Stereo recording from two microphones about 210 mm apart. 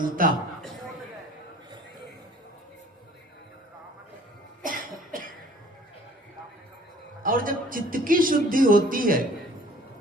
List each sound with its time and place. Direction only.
0.2 s a man's voice: 40° right (ahead or behind)
4.6 s cough: 40° right (ahead or behind)
7.2 s a man's voice: 40° right (ahead or behind)